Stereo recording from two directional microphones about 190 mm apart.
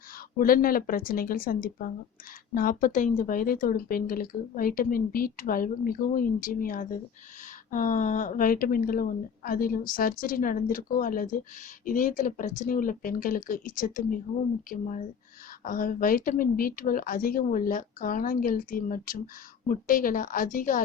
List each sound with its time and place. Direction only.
0.3 s speech: 50° left (ahead or behind)